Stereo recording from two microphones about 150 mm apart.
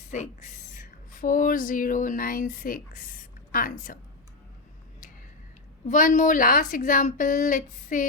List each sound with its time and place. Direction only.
0.1 s speech: 55° left (ahead or behind)
5.9 s speech: 60° left (ahead or behind)